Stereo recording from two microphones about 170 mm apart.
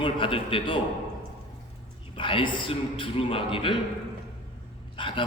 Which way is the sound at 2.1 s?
30° left (ahead or behind).